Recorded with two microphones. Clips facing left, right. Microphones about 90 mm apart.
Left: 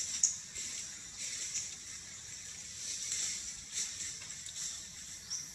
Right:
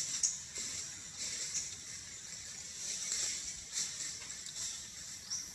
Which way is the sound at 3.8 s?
15° right (ahead or behind).